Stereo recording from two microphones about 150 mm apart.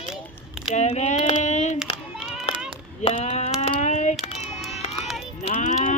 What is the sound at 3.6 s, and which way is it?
Child singing, 50° left (ahead or behind).